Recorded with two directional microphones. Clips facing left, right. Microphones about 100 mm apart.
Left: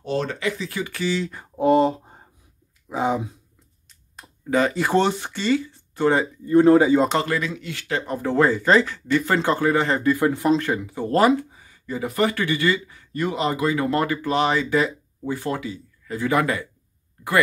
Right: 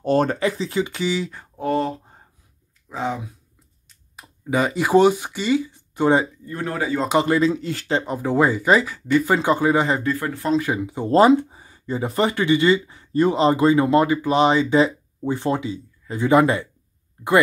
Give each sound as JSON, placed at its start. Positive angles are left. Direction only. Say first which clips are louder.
{"t": 0.0, "sound": "speech", "louder": "right 6 dB", "side_deg": -50}
{"t": 0.7, "sound": "speech", "louder": "right 3 dB", "side_deg": -20}
{"t": 1.6, "sound": "a sound", "louder": "left 5 dB", "side_deg": 20}
{"t": 4.2, "sound": "speech", "louder": "left 1 dB", "side_deg": -15}
{"t": 6.4, "sound": "speech", "louder": "left 12 dB", "side_deg": 25}
{"t": 7.2, "sound": "speech", "louder": "right 7 dB", "side_deg": -30}
{"t": 8.0, "sound": "speech", "louder": "left 1 dB", "side_deg": -15}
{"t": 10.1, "sound": "speech", "louder": "left 5 dB", "side_deg": 15}
{"t": 10.5, "sound": "speech", "louder": "even", "side_deg": -10}